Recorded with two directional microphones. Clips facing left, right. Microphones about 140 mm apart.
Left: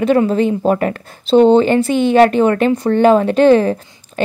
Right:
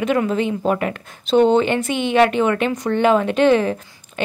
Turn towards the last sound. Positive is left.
turn(degrees=35)  # may be behind; listen again after turning